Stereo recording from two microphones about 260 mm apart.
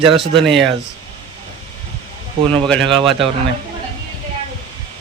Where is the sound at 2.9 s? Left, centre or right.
Centre.